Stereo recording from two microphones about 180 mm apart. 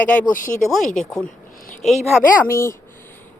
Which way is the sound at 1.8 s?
Centre (ahead or behind).